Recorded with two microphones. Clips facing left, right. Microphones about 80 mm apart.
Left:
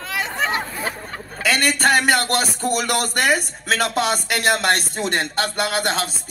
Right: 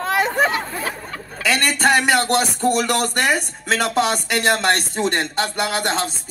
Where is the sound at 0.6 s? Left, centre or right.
Centre.